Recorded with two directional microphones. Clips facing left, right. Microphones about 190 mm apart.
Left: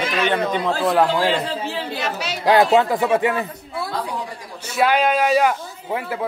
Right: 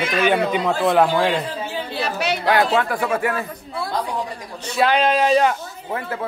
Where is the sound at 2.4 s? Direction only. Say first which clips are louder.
Left 5 dB; 25° left (ahead or behind).